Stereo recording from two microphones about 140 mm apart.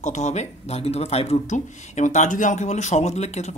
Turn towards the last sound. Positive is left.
turn(degrees=55)  # may be behind; listen again after turning